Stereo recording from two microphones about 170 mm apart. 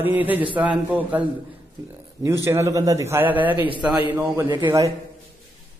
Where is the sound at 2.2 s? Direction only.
15° right (ahead or behind).